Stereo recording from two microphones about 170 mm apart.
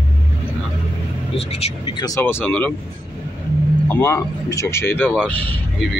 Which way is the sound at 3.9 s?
15° left (ahead or behind).